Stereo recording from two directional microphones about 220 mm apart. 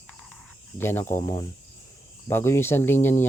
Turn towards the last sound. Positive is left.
turn(degrees=10)  # may be behind; listen again after turning